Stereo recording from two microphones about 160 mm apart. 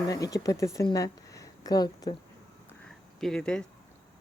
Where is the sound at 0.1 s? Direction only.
20° left (ahead or behind).